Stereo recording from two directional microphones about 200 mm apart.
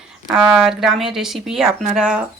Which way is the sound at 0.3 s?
Centre (ahead or behind).